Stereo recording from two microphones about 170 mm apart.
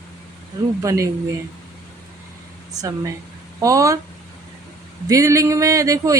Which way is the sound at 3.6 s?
20° right (ahead or behind).